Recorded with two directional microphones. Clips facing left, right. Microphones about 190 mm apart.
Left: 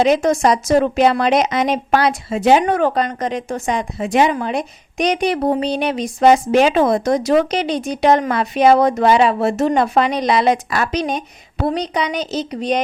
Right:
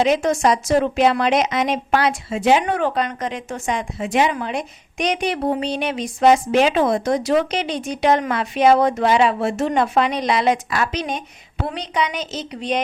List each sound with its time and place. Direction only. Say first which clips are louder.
0.0 s speech: left 3 dB; 40° left (ahead or behind)